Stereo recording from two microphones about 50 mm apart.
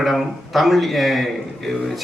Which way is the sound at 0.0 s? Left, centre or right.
Centre.